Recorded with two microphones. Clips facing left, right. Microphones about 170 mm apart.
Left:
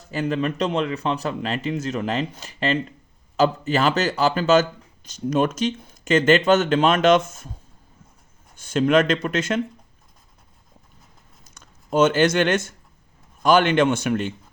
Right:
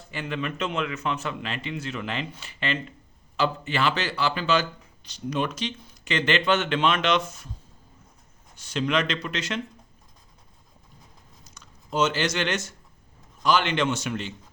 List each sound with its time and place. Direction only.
0.1 s speech: 40° left (ahead or behind)
8.5 s speech: 50° left (ahead or behind)
11.4 s speech: 50° left (ahead or behind)